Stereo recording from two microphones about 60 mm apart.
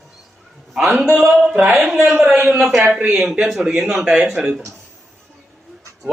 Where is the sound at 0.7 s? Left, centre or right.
Centre.